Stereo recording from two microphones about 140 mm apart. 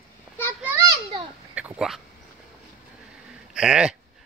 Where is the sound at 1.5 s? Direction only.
5° right (ahead or behind).